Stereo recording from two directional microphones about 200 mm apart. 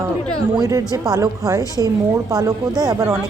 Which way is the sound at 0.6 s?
15° right (ahead or behind).